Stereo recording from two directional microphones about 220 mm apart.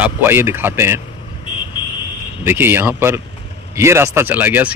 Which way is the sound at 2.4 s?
10° right (ahead or behind).